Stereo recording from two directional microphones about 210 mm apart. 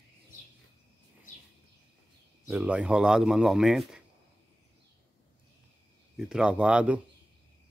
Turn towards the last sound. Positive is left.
turn(degrees=-5)  # may be behind; listen again after turning